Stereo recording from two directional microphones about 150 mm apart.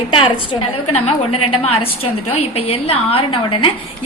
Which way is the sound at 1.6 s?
40° left (ahead or behind).